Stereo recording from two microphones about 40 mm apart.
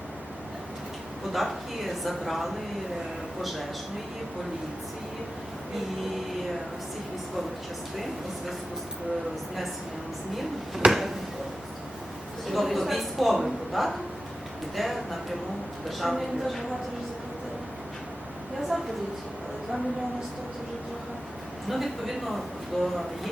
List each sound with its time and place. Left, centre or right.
1.3 s a man's voice: centre
10.8 s a sound: right
12.5 s a man's voice: centre
18.7 s a woman's voice: centre
21.7 s a man's voice: centre